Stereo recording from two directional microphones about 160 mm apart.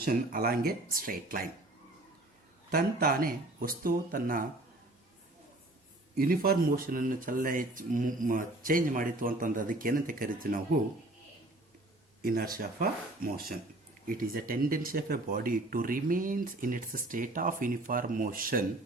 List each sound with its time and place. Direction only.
0.0 s speech: 65° right (ahead or behind)
2.7 s speech: 65° right (ahead or behind)
6.1 s speech: 70° right (ahead or behind)
12.2 s speech: 65° right (ahead or behind)